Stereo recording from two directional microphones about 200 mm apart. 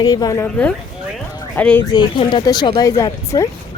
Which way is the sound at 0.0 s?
20° left (ahead or behind).